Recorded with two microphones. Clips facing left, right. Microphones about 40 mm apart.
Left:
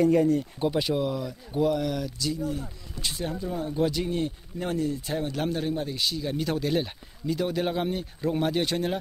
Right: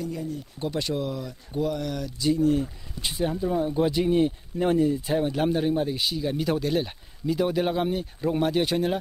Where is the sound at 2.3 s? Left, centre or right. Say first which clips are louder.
Right 11 dB; right.